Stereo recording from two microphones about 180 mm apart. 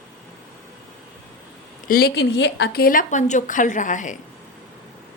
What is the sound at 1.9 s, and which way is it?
Speech, 60° left (ahead or behind).